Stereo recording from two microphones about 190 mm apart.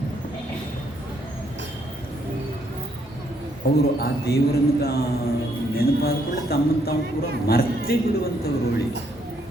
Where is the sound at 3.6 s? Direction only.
55° left (ahead or behind).